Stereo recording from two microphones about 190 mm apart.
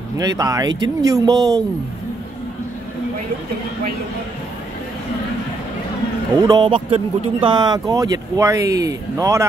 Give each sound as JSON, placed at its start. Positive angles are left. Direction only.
{"t": 0.2, "sound": "speech", "side_deg": -20}
{"t": 6.4, "sound": "speech", "side_deg": -25}